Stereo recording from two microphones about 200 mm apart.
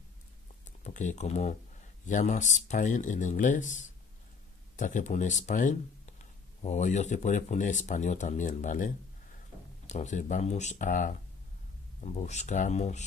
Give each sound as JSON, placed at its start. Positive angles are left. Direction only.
{"t": 0.7, "sound": "speech", "side_deg": 40}